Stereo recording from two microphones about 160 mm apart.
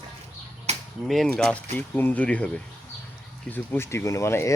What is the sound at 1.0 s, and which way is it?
Speech, centre (ahead or behind).